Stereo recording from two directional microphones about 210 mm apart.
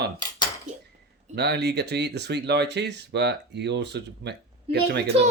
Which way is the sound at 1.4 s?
50° right (ahead or behind).